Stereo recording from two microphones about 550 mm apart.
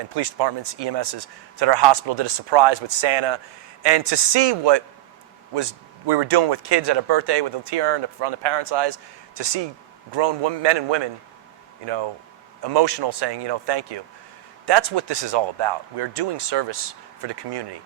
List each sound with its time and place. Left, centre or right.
0.0 s speech: right
6.1 s speech: right
12.6 s speech: right